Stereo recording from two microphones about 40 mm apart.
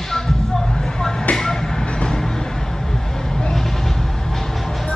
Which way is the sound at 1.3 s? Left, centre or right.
Centre.